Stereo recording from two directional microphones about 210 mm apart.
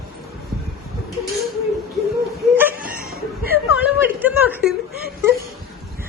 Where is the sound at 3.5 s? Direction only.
10° right (ahead or behind).